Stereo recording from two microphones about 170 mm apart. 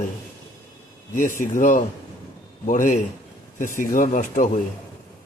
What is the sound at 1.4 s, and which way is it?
A man's voice, 50° left (ahead or behind).